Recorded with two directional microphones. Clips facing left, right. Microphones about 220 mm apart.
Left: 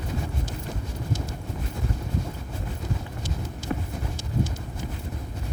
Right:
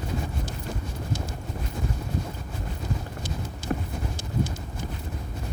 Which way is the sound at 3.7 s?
45° right (ahead or behind).